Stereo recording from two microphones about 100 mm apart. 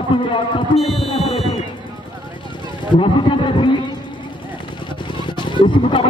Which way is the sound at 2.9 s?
55° left (ahead or behind).